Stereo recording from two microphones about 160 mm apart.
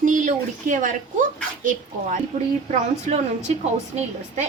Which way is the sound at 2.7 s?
45° right (ahead or behind).